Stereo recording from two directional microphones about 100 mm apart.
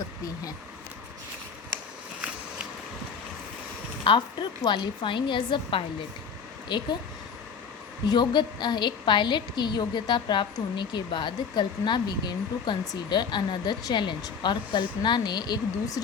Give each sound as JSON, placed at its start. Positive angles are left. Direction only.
{"t": 4.0, "sound": "a woman's voice", "side_deg": 55}
{"t": 8.0, "sound": "a woman's voice", "side_deg": 45}